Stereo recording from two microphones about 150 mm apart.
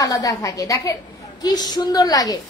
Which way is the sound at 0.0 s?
25° left (ahead or behind).